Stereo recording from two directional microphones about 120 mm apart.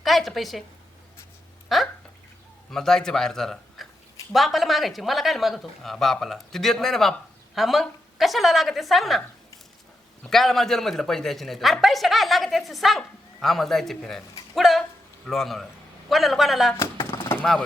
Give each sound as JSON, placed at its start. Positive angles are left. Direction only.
{"t": 0.0, "sound": "a woman's voice", "side_deg": 0}
{"t": 1.7, "sound": "a man's voice", "side_deg": 0}
{"t": 10.2, "sound": "speech", "side_deg": 0}
{"t": 17.2, "sound": "a sound", "side_deg": 20}